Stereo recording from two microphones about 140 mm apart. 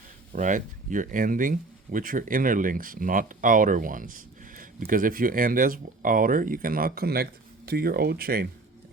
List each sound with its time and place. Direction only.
0.3 s speech: 65° right (ahead or behind); by 8.4 s 90° right